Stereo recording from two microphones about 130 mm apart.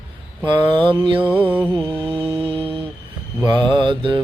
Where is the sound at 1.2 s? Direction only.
15° right (ahead or behind).